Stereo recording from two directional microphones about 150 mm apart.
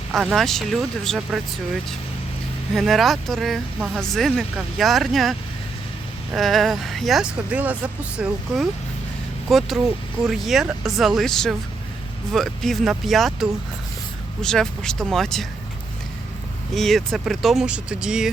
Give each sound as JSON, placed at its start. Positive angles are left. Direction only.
{"t": 0.1, "sound": "speech", "side_deg": 0}
{"t": 2.7, "sound": "speech", "side_deg": 0}
{"t": 16.7, "sound": "speech", "side_deg": 0}